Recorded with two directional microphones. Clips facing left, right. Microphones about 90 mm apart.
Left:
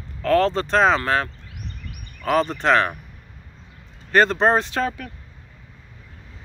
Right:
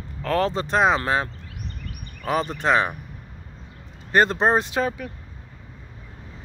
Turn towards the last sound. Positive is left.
turn(degrees=-15)  # may be behind; listen again after turning